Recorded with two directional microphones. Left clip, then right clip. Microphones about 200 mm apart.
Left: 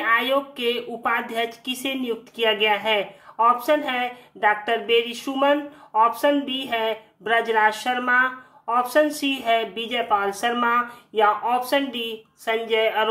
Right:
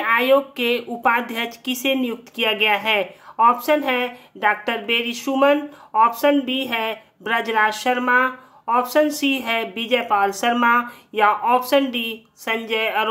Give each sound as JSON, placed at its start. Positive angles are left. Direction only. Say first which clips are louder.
{"t": 0.0, "sound": "a woman's voice", "louder": "right 4 dB", "side_deg": -20}